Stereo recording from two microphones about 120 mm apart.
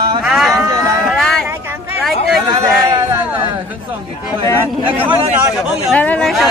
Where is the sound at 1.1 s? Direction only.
Centre (ahead or behind).